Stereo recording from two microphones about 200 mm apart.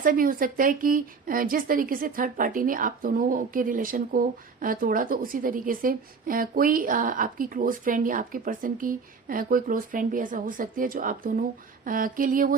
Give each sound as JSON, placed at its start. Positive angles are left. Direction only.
{"t": 0.0, "sound": "a woman's voice", "side_deg": -45}